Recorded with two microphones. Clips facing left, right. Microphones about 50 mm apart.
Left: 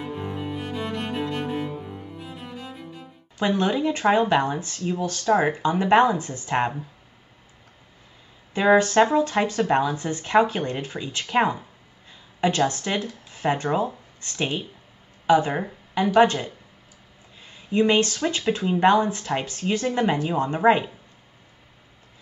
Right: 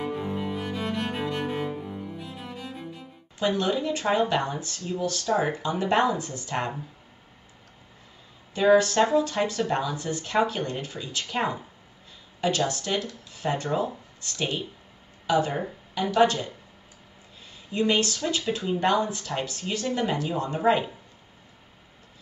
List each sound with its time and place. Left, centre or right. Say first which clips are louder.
0.2 s music: even; centre
2.1 s music: left 1 dB; centre
3.3 s speech: left 3 dB; left
8.5 s speech: left 2 dB; left
17.5 s speech: left 4 dB; left